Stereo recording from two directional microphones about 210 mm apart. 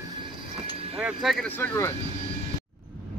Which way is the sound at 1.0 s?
Centre (ahead or behind).